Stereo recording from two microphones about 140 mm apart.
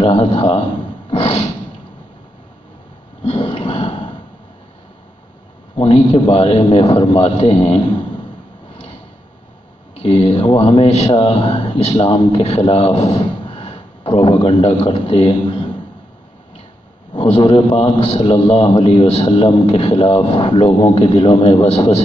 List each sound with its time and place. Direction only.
0.0 s a man's voice: 45° left (ahead or behind)
3.3 s a sound: 40° left (ahead or behind)
5.8 s a man's voice: 40° left (ahead or behind)
10.0 s a man's voice: 40° left (ahead or behind)
17.1 s a man's voice: 40° left (ahead or behind)